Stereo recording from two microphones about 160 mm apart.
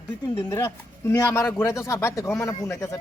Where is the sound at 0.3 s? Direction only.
15° left (ahead or behind).